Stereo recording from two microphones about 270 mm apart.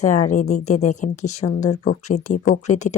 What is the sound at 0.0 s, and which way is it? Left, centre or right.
Speech, left.